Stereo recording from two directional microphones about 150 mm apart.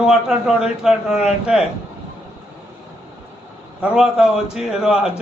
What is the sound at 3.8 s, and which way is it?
A man's voice, 5° right (ahead or behind).